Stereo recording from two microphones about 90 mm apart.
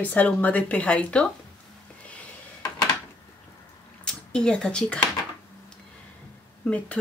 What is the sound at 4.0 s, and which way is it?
Speech, 10° left (ahead or behind).